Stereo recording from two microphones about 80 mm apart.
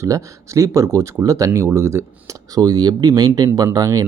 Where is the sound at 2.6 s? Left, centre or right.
Right.